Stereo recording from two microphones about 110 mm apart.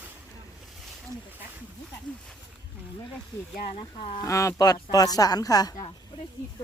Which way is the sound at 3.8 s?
50° left (ahead or behind).